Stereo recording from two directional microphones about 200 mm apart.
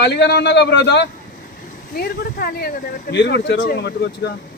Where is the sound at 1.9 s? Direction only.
45° left (ahead or behind).